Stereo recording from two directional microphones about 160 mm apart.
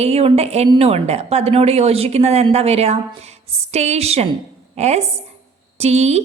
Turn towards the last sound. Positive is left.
turn(degrees=-45)  # may be behind; listen again after turning